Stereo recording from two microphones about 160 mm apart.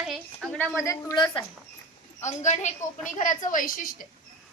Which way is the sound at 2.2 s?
45° left (ahead or behind).